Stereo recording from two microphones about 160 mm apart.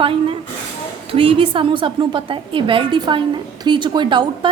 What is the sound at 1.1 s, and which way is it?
A woman's voice, 35° right (ahead or behind).